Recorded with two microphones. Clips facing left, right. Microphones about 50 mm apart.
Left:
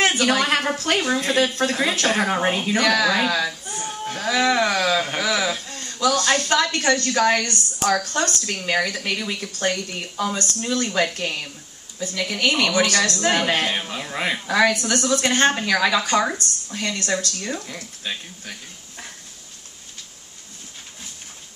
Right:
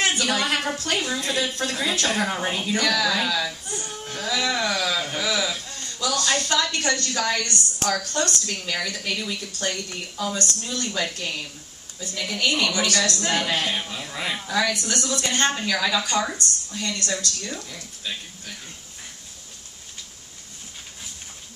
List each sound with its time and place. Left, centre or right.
0.2 s speech: left
12.0 s speech: left